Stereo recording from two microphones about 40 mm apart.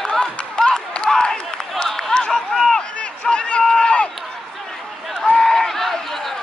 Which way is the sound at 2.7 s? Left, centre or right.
Left.